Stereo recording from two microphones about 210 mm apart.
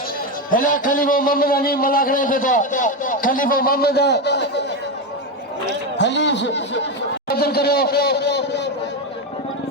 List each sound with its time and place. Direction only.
0.5 s a man's voice: 40° left (ahead or behind)
6.0 s speech: 55° left (ahead or behind)
7.3 s a man's voice: 45° left (ahead or behind)